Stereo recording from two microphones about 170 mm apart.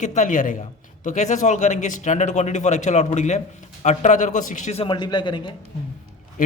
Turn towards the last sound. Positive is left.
turn(degrees=30)  # may be behind; listen again after turning